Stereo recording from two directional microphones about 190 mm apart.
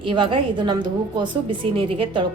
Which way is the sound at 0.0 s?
25° right (ahead or behind).